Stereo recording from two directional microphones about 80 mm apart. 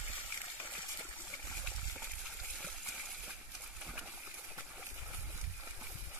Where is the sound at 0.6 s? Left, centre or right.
Left.